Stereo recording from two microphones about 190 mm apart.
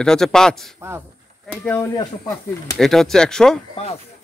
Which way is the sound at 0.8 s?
10° right (ahead or behind).